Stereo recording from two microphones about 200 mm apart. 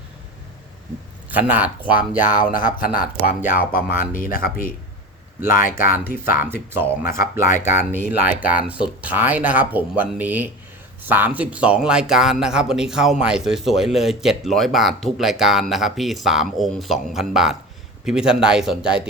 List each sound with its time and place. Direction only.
1.3 s speech: 10° right (ahead or behind)
2.8 s speech: 45° left (ahead or behind)
6.4 s speech: 10° right (ahead or behind)
7.2 s speech: 40° left (ahead or behind)
7.9 s speech: 10° right (ahead or behind)